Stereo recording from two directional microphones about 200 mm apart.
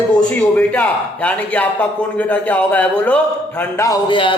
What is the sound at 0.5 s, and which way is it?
A man's voice, 10° left (ahead or behind).